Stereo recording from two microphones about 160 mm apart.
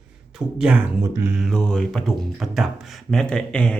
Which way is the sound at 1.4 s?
5° left (ahead or behind).